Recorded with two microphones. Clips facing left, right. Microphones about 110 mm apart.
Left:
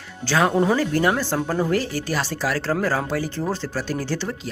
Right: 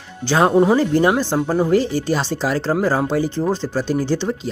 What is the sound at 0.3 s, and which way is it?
Speech, 20° right (ahead or behind).